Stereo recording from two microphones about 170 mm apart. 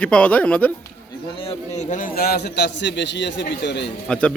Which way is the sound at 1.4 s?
40° left (ahead or behind).